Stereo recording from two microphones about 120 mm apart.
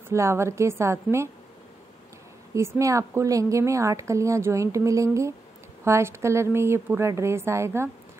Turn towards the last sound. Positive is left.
turn(degrees=-20)  # may be behind; listen again after turning